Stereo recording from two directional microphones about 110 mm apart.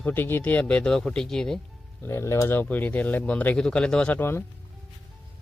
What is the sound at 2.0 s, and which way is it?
Speech, 25° left (ahead or behind).